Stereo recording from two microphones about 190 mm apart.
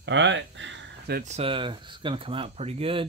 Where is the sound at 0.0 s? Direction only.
70° right (ahead or behind).